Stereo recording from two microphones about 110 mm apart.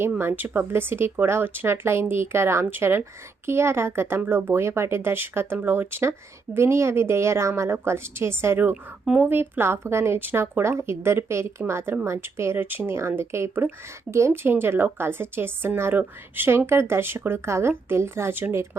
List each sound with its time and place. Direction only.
0.2 s speech: 20° right (ahead or behind)